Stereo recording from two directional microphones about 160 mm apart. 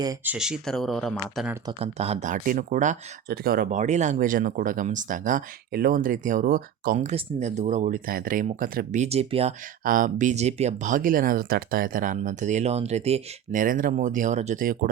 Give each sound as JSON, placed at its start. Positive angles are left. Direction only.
{"t": 0.3, "sound": "speech", "side_deg": -5}
{"t": 1.8, "sound": "speech", "side_deg": -40}
{"t": 3.2, "sound": "speech", "side_deg": -65}
{"t": 5.7, "sound": "speech", "side_deg": -65}
{"t": 9.0, "sound": "speech", "side_deg": -40}
{"t": 9.8, "sound": "speech", "side_deg": -60}